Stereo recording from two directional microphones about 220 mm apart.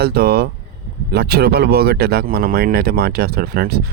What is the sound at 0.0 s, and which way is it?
Speech, 45° right (ahead or behind).